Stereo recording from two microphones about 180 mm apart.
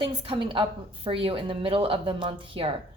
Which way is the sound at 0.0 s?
25° right (ahead or behind).